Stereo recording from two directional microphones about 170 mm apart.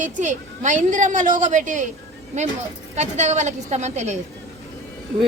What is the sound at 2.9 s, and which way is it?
A woman's voice, 40° right (ahead or behind).